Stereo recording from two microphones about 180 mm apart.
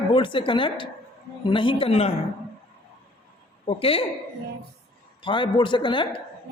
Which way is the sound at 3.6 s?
35° left (ahead or behind).